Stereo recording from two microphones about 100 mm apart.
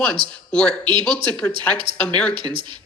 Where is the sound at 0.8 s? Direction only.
55° right (ahead or behind).